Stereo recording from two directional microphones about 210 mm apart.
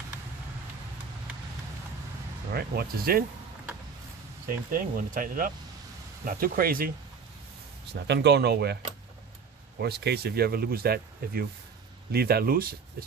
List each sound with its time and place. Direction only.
2.5 s speech: 45° right (ahead or behind)
4.4 s speech: 40° right (ahead or behind)
7.9 s speech: 55° right (ahead or behind)
9.8 s speech: 50° right (ahead or behind)